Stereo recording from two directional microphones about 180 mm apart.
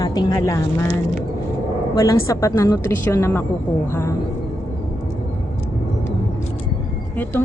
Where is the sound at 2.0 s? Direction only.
20° left (ahead or behind).